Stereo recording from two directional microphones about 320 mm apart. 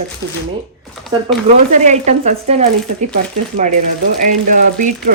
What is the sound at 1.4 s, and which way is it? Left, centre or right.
Speech, right.